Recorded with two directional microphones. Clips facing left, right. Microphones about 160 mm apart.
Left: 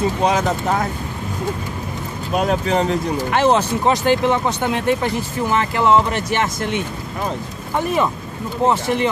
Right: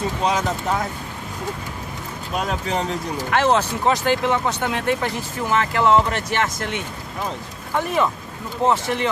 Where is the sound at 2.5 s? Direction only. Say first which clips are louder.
Left 6 dB; 65° left (ahead or behind).